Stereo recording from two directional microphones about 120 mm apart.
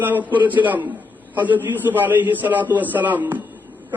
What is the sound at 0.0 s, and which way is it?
A man's voice, 15° right (ahead or behind).